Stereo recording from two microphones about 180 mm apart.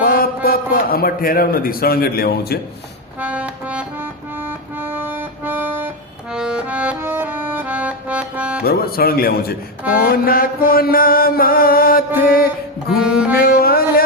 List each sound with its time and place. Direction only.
0.0 s a man's voice: 55° left (ahead or behind)
3.2 s music: 10° right (ahead or behind)
8.6 s mantra: 55° left (ahead or behind)
13.0 s saxophone: 5° right (ahead or behind)
13.4 s music: 55° left (ahead or behind)